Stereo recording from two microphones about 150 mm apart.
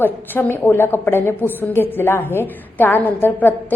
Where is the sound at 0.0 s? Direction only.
15° left (ahead or behind).